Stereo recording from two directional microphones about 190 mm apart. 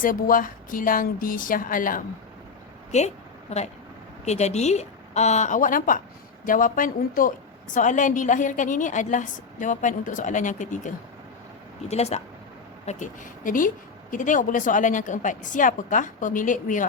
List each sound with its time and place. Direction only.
0.0 s speech: 45° left (ahead or behind)
4.3 s a woman's voice: 35° left (ahead or behind)